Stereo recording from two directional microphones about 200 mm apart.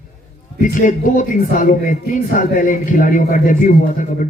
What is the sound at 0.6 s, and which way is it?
A man's voice, 40° left (ahead or behind).